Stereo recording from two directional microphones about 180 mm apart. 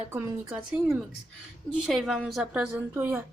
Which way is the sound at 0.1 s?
15° right (ahead or behind).